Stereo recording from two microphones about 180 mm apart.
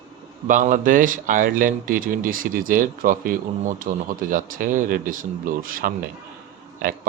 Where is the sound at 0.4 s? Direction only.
45° right (ahead or behind).